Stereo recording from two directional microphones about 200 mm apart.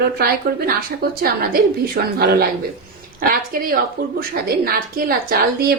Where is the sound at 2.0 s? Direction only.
50° right (ahead or behind).